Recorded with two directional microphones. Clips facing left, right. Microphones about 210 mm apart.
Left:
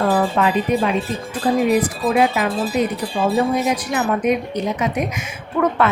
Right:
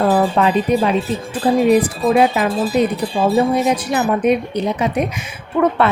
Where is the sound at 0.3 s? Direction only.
35° right (ahead or behind).